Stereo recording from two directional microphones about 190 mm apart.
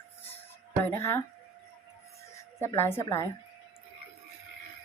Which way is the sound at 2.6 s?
15° left (ahead or behind).